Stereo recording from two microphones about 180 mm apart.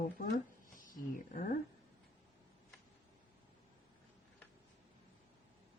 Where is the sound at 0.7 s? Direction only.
50° left (ahead or behind).